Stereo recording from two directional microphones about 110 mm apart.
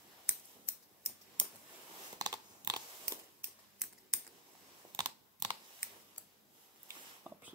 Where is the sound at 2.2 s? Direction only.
35° right (ahead or behind).